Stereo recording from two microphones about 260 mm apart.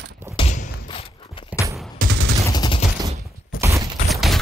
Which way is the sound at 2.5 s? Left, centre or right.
Centre.